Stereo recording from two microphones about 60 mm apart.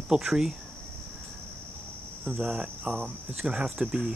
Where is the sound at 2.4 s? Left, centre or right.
Centre.